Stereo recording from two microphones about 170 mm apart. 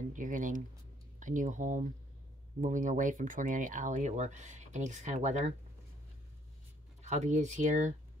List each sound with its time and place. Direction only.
0.1 s speech: 50° right (ahead or behind)
7.0 s speech: 45° right (ahead or behind)